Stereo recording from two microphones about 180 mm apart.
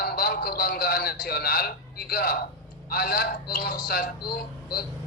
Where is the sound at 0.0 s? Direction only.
55° left (ahead or behind).